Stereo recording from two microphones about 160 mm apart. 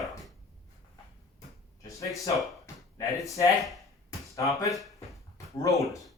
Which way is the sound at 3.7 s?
Centre (ahead or behind).